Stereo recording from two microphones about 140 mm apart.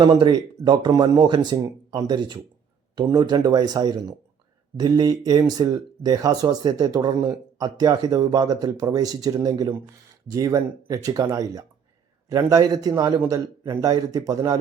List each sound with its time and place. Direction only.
0.0 s speech: 35° right (ahead or behind)